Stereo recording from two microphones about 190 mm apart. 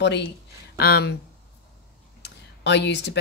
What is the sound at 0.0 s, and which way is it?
Speech, 65° left (ahead or behind).